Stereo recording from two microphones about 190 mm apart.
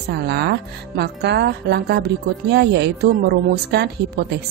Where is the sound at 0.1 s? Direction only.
60° right (ahead or behind).